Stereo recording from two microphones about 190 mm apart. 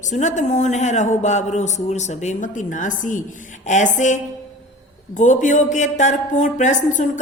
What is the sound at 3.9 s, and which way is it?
A woman's voice, 40° left (ahead or behind).